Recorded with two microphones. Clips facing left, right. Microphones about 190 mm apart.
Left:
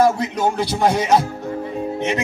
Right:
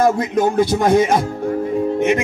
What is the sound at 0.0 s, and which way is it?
Music, 45° right (ahead or behind).